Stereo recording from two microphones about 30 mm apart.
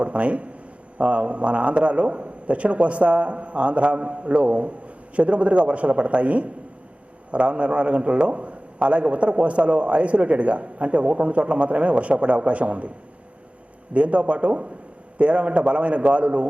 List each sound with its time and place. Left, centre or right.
0.0 s a man's voice: right
13.9 s a man's voice: right